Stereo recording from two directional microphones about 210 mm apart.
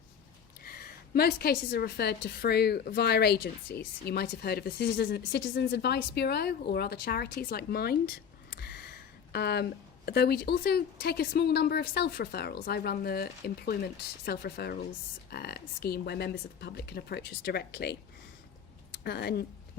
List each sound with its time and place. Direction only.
0.6 s a woman's voice: 45° left (ahead or behind)
8.4 s a sound: 50° left (ahead or behind)
10.1 s a woman's voice: 50° left (ahead or behind)
19.0 s a woman's voice: 50° left (ahead or behind)